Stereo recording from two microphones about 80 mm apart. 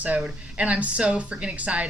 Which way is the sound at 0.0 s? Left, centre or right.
Centre.